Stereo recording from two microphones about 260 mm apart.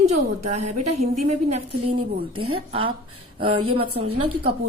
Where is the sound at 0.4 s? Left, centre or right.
Right.